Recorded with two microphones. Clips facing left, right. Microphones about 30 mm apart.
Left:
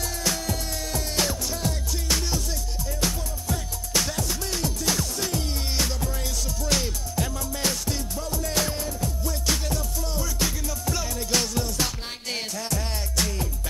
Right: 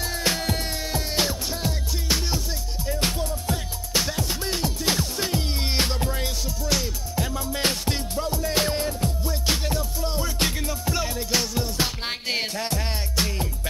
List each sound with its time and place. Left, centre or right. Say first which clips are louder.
0.0 s music: right 3 dB; right; by 2.4 s centre
3.0 s music: right 2 dB; right
3.9 s music: right 1 dB; centre
6.6 s music: even; centre
7.3 s music: right 3 dB; right
8.3 s music: right 3 dB; right
10.9 s music: right 1 dB; centre
11.6 s music: right 2 dB; right